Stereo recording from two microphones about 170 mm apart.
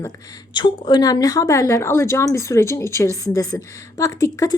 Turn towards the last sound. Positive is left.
turn(degrees=20)  # may be behind; listen again after turning